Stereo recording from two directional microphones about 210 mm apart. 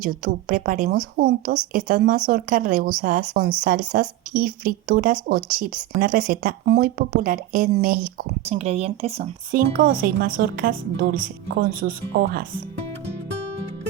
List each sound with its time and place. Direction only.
0.0 s a woman's voice: 40° right (ahead or behind)
8.4 s speech: 30° right (ahead or behind)
9.5 s a woman's voice: 40° right (ahead or behind)